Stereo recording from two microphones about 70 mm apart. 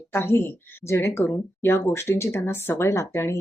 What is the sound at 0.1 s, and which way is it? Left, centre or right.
Speech, left.